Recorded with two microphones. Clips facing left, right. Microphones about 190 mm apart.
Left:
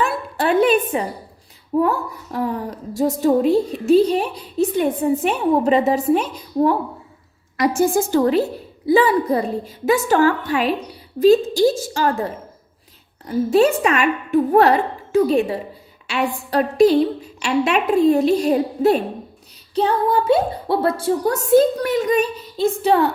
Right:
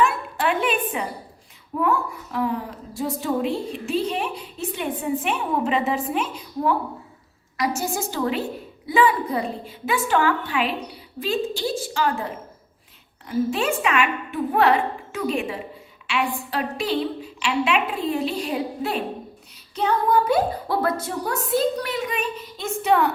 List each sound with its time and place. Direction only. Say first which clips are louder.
0.0 s a sound: left 1 dB; 40° left (ahead or behind)
1.8 s a woman's voice: left 1 dB; 40° left (ahead or behind)
7.5 s a woman's voice: left 8 dB; 55° left (ahead or behind)
19.7 s a woman's voice: left 3 dB; 30° left (ahead or behind)